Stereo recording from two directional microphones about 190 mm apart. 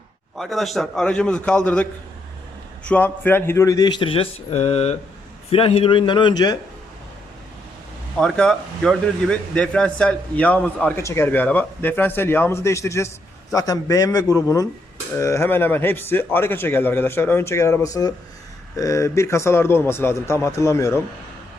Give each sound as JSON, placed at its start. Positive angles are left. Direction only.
{"t": 0.3, "sound": "a man's voice", "side_deg": 0}
{"t": 8.2, "sound": "a man's voice", "side_deg": 5}